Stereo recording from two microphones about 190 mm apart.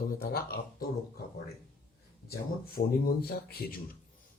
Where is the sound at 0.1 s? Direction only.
55° left (ahead or behind).